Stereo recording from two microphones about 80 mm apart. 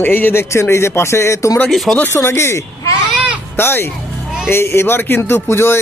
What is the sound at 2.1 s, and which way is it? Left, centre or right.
Speech, left.